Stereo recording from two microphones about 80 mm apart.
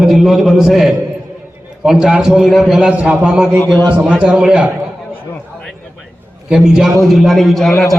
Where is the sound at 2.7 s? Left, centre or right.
Centre.